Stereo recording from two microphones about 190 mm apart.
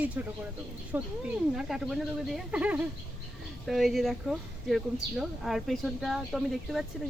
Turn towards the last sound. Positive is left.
turn(degrees=0)  # may be behind; listen again after turning